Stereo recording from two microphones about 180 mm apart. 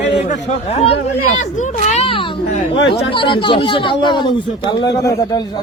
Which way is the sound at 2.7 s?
70° left (ahead or behind).